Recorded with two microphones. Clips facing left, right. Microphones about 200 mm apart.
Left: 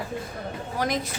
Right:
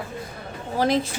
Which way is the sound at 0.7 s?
30° right (ahead or behind).